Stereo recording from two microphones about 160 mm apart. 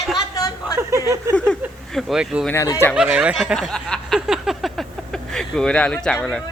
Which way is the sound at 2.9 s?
5° right (ahead or behind).